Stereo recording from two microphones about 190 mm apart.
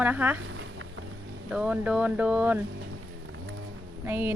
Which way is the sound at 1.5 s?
5° right (ahead or behind).